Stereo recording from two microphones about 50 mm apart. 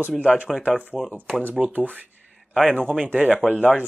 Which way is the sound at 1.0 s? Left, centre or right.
Centre.